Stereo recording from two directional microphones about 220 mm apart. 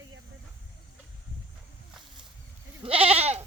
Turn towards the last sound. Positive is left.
turn(degrees=-30)  # may be behind; listen again after turning